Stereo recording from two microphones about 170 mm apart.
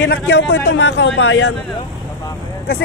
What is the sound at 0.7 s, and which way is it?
Speech, 90° left.